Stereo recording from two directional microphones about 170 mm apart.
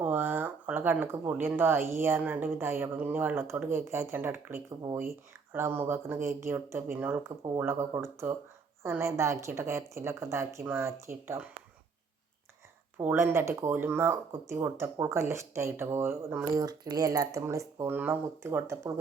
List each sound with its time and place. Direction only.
0.0 s speech: 10° right (ahead or behind)
13.0 s speech: 15° right (ahead or behind)